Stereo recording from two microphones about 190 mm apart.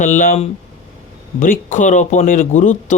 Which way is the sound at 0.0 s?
45° left (ahead or behind).